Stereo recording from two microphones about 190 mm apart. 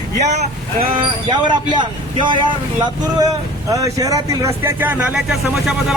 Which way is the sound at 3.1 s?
20° right (ahead or behind).